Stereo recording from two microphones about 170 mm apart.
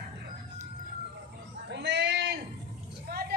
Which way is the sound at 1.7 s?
90° right.